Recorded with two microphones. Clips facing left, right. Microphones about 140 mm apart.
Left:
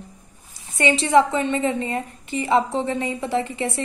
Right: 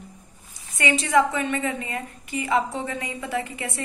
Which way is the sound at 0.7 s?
30° left (ahead or behind).